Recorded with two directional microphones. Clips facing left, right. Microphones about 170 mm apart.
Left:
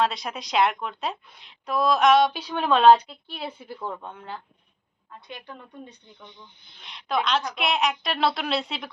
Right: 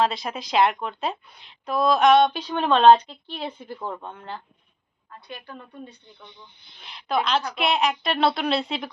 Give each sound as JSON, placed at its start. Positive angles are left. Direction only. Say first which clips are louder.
{"t": 0.0, "sound": "a woman's voice", "louder": "right 2 dB", "side_deg": 0}
{"t": 5.3, "sound": "a woman's voice", "louder": "right 1 dB", "side_deg": 20}
{"t": 6.7, "sound": "a woman's voice", "louder": "right 2 dB", "side_deg": 0}